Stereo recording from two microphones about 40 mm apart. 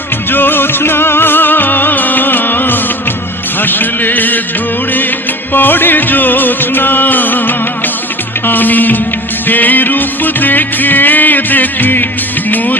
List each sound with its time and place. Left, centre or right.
0.3 s music: left
5.5 s music: left